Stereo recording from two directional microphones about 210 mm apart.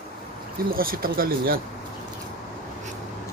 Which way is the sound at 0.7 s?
45° right (ahead or behind).